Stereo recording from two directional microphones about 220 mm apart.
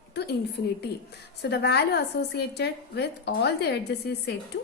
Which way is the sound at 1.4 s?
50° left (ahead or behind).